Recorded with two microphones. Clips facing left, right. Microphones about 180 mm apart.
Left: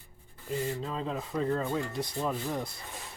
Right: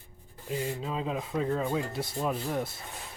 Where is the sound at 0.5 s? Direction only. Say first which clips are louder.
Even; 15° right (ahead or behind).